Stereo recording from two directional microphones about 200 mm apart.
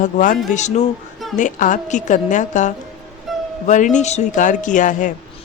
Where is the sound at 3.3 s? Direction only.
Centre (ahead or behind).